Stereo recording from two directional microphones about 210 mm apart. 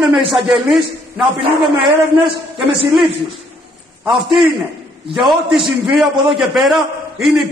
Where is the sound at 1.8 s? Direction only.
25° right (ahead or behind).